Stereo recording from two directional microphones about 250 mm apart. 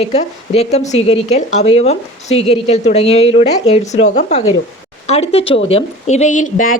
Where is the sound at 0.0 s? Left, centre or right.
Left.